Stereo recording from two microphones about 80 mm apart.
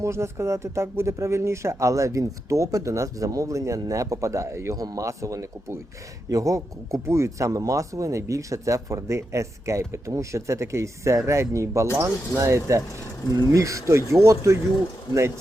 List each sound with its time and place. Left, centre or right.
0.0 s speech: right